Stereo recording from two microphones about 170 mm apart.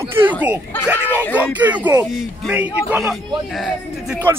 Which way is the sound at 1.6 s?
10° right (ahead or behind).